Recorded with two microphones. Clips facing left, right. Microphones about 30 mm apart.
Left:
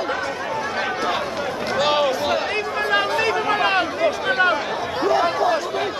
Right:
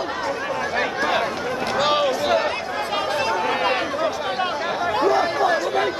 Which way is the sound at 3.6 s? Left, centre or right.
Centre.